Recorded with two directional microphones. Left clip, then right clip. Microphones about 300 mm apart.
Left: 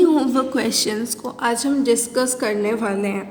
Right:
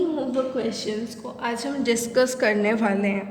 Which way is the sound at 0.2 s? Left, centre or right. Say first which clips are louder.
Left 5 dB; left.